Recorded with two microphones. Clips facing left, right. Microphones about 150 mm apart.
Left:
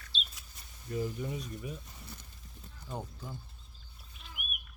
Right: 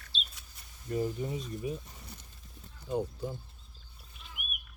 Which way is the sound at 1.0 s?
25° right (ahead or behind).